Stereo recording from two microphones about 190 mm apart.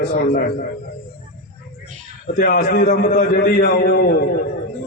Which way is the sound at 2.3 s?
55° left (ahead or behind).